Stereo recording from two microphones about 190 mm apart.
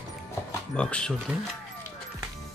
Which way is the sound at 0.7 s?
5° left (ahead or behind).